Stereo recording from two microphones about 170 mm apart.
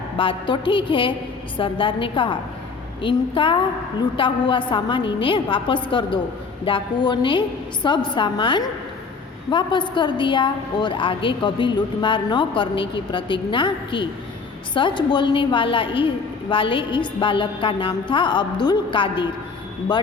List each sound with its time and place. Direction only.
0.2 s a woman's voice: 30° left (ahead or behind)